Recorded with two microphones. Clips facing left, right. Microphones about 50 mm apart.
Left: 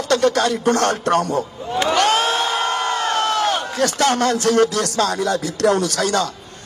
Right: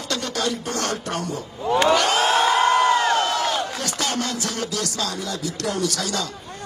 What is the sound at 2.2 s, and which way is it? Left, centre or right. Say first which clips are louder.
Crowd: right 2 dB; right.